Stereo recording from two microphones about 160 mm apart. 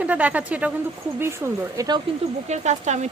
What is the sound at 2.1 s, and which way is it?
Speech, 35° right (ahead or behind).